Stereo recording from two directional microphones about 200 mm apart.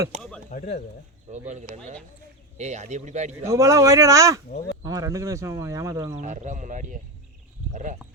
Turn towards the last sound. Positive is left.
turn(degrees=-40)  # may be behind; listen again after turning